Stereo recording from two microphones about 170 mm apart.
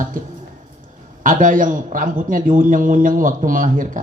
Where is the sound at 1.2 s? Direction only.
50° right (ahead or behind).